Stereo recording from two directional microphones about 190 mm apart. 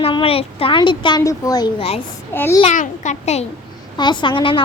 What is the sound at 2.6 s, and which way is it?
Speech, 40° left (ahead or behind).